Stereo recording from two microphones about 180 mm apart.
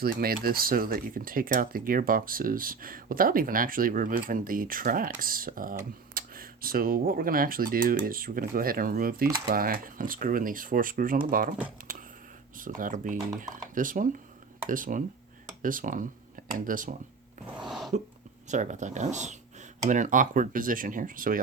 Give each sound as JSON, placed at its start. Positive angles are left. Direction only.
{"t": 0.0, "sound": "speech", "side_deg": -55}
{"t": 12.5, "sound": "speech", "side_deg": -50}
{"t": 17.7, "sound": "a sound", "side_deg": 0}
{"t": 18.4, "sound": "speech", "side_deg": -40}